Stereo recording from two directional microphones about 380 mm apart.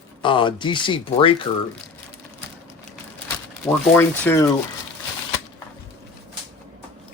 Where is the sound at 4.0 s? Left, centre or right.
Centre.